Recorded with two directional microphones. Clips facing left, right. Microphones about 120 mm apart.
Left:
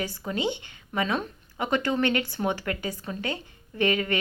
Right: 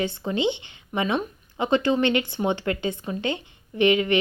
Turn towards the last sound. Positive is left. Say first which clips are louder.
# right 5 dB
turn(degrees=-20)  # may be behind; listen again after turning